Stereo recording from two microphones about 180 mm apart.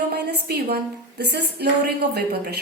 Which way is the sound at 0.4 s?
60° right (ahead or behind).